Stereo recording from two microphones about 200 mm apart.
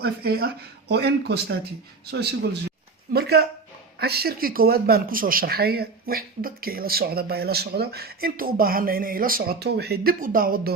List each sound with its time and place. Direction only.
0.0 s speech: 50° right (ahead or behind)